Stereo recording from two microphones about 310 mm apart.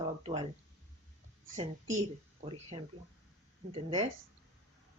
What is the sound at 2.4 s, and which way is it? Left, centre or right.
Speech, centre.